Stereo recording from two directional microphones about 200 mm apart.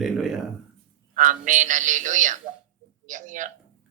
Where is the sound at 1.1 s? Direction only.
40° right (ahead or behind).